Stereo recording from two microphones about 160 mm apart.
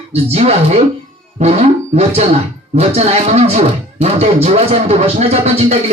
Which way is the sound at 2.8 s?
40° right (ahead or behind).